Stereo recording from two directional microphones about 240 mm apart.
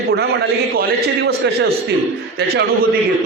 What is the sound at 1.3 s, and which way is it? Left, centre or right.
A man's voice, right.